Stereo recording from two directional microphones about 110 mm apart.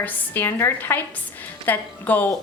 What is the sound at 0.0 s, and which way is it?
A woman's voice, 20° left (ahead or behind).